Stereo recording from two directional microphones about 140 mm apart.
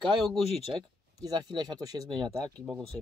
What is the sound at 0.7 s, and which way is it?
Speech, 30° right (ahead or behind).